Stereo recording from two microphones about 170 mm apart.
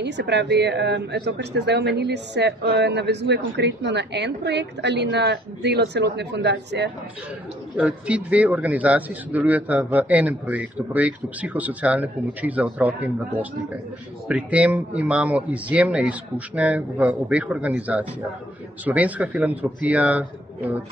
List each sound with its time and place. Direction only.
0.0 s speech: 90° right
7.7 s a man's voice: 5° right (ahead or behind)